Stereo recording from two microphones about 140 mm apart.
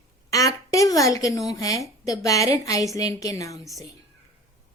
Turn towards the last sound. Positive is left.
turn(degrees=25)  # may be behind; listen again after turning